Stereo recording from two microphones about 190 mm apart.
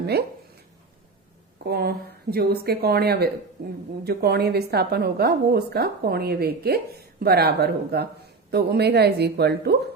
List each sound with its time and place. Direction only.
0.0 s speech: 60° right (ahead or behind)
1.6 s a woman's voice: 55° right (ahead or behind)